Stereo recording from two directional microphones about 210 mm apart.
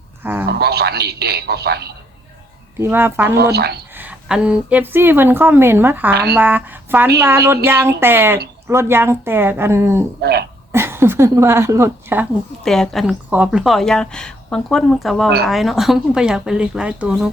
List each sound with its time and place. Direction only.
0.2 s speech: 10° right (ahead or behind)
0.6 s a man's voice: 50° right (ahead or behind)
2.7 s a woman's voice: 10° right (ahead or behind)
3.3 s a man's voice: 50° right (ahead or behind)
3.9 s a woman's voice: 5° right (ahead or behind)
10.2 s a man's voice: 50° right (ahead or behind)
10.7 s speech: 10° right (ahead or behind)
12.6 s speech: centre (ahead or behind)